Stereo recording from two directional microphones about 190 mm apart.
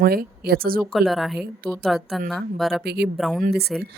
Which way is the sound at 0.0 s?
50° right (ahead or behind).